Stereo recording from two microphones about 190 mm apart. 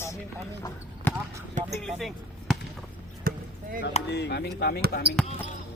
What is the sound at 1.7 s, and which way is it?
Chop, centre (ahead or behind).